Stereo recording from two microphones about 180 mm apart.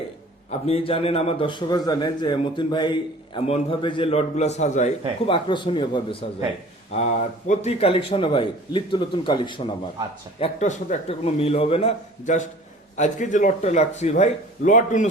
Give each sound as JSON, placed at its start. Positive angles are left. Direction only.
{"t": 0.6, "sound": "a man's voice", "side_deg": 30}
{"t": 5.2, "sound": "a man's voice", "side_deg": 25}
{"t": 6.9, "sound": "a man's voice", "side_deg": 40}
{"t": 10.4, "sound": "a man's voice", "side_deg": 40}